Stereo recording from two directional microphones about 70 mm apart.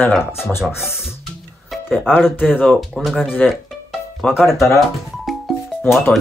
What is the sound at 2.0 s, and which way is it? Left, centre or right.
Speech, centre.